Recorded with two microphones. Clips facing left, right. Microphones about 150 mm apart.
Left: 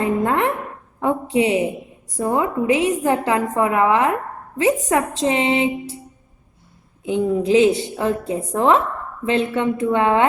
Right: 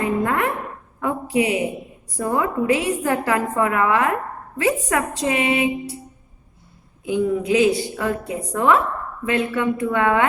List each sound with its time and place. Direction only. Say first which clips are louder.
0.0 s a sound: left 2 dB; 25° left (ahead or behind)
0.9 s a woman's voice: left 2 dB; 25° left (ahead or behind)
7.0 s a woman's voice: left 1 dB; 25° left (ahead or behind)